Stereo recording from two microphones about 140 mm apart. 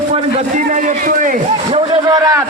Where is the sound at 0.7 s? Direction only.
70° right (ahead or behind).